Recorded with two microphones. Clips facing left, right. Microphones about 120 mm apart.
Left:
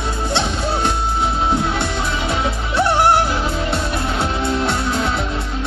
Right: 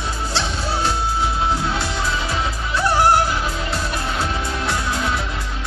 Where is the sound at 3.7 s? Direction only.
25° left (ahead or behind).